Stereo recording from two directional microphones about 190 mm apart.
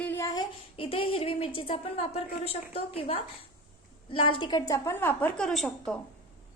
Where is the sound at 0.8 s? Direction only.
30° left (ahead or behind); by 5.9 s centre (ahead or behind).